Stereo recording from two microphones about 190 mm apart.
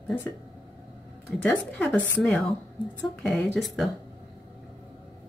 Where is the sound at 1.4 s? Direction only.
5° left (ahead or behind).